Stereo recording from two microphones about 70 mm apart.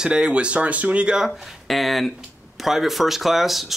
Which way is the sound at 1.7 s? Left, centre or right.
Centre.